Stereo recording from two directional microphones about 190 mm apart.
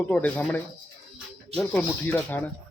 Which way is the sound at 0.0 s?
10° left (ahead or behind).